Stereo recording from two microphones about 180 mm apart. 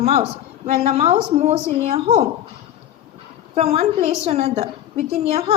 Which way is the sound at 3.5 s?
35° right (ahead or behind).